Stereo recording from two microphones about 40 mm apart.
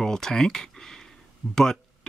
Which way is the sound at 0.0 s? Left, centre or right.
Centre.